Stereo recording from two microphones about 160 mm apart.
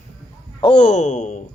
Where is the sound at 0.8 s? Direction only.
50° left (ahead or behind).